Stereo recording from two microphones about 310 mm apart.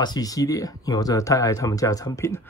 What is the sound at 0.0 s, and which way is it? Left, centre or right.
Speech, centre.